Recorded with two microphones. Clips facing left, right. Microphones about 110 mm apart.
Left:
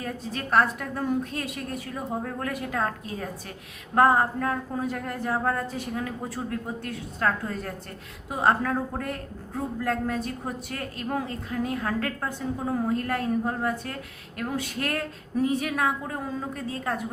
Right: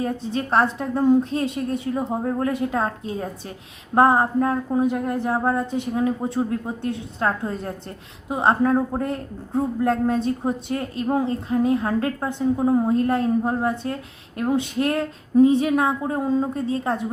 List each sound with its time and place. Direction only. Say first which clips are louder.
0.0 s a woman's voice: right 8 dB; 25° right (ahead or behind)